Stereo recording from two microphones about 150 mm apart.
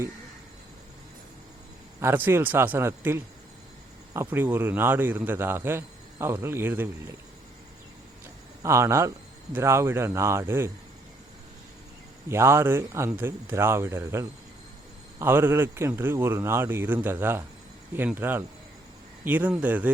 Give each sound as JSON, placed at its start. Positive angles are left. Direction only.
{"t": 2.0, "sound": "a man's voice", "side_deg": -15}
{"t": 8.6, "sound": "a man's voice", "side_deg": -20}
{"t": 12.3, "sound": "a man's voice", "side_deg": -15}